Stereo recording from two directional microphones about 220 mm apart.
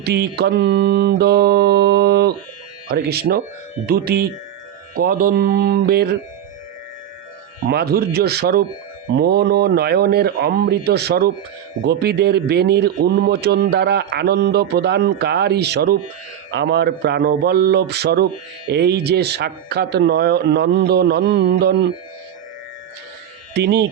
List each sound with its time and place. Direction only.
0.0 s a man's voice: 45° right (ahead or behind)
7.7 s a man's voice: 45° right (ahead or behind)
23.6 s a man's voice: 50° right (ahead or behind)